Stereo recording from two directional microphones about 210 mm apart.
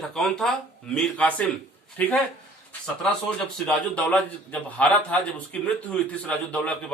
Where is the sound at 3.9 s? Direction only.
5° left (ahead or behind).